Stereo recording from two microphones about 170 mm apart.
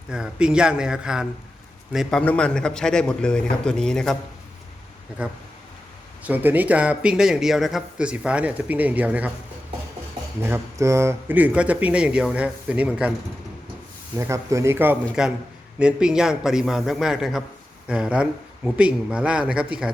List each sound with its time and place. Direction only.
0.1 s a man's voice: 5° right (ahead or behind)
5.2 s a man's voice: 5° right (ahead or behind)
10.4 s a man's voice: 15° right (ahead or behind)
14.2 s a man's voice: 15° right (ahead or behind)